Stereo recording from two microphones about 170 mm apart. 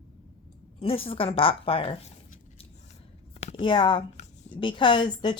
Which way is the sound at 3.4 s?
35° left (ahead or behind).